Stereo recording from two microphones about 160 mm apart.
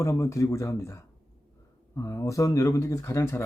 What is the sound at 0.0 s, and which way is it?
Speech, 20° left (ahead or behind).